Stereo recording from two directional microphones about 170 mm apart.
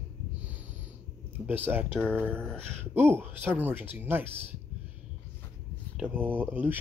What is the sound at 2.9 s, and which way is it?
Speech, 10° right (ahead or behind).